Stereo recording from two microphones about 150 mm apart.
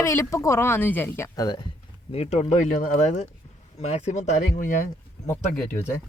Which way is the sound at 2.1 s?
45° left (ahead or behind).